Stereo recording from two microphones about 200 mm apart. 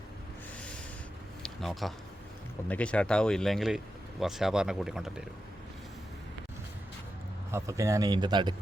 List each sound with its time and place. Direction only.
1.4 s a sound: centre (ahead or behind)
2.6 s speech: 5° left (ahead or behind)
7.5 s a man's voice: 15° right (ahead or behind)